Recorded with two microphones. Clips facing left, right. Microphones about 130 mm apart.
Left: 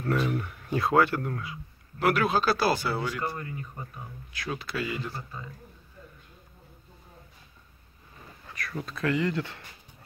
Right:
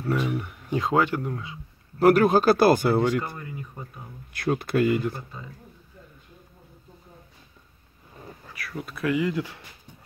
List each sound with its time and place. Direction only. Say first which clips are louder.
0.0 s speech: right 1 dB; 10° right (ahead or behind)
2.0 s speech: right 7 dB; 40° right (ahead or behind)
8.5 s speech: even; 5° right (ahead or behind)